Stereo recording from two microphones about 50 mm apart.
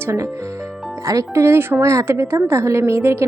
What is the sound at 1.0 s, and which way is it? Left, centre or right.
Speech, right.